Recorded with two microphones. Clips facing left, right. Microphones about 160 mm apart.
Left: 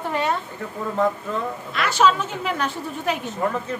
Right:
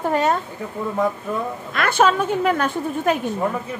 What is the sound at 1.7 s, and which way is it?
A woman's voice, 50° right (ahead or behind).